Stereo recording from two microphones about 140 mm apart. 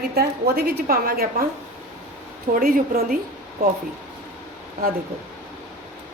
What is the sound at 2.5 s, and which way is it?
Speech, 90° right.